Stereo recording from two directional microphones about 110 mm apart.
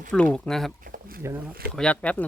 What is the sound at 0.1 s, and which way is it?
Speech, 10° left (ahead or behind).